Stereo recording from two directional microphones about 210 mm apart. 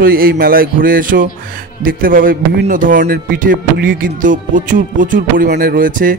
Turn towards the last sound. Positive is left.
turn(degrees=-40)  # may be behind; listen again after turning